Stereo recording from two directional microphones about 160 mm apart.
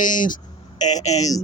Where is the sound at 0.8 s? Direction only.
25° left (ahead or behind).